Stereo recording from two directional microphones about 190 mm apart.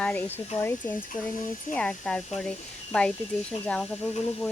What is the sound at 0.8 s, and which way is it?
Speech, 45° left (ahead or behind).